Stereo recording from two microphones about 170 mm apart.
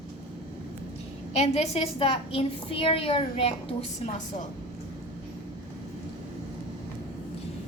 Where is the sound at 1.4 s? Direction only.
35° left (ahead or behind).